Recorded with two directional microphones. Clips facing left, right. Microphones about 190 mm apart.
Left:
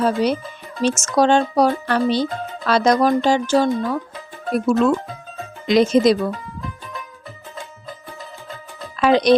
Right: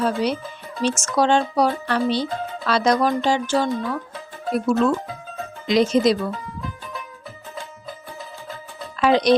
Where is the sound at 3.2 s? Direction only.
40° left (ahead or behind).